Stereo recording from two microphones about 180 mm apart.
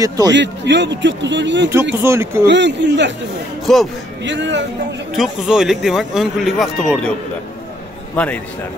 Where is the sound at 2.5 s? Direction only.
75° right (ahead or behind).